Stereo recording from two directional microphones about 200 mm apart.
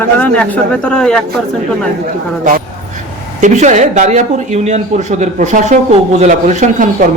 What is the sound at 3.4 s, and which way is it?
Speech, 35° right (ahead or behind).